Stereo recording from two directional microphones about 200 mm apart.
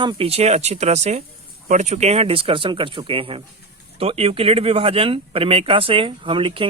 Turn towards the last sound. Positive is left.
turn(degrees=-25)  # may be behind; listen again after turning